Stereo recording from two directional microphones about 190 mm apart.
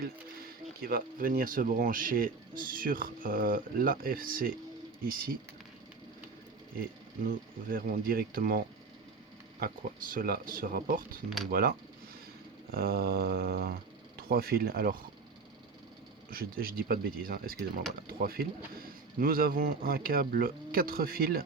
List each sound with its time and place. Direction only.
0.0 s speech: 50° right (ahead or behind)
7.3 s speech: 45° right (ahead or behind)
12.7 s speech: 55° right (ahead or behind)
16.3 s speech: 50° right (ahead or behind)